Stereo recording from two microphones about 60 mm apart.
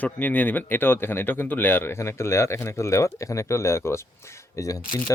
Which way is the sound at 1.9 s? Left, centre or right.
Left.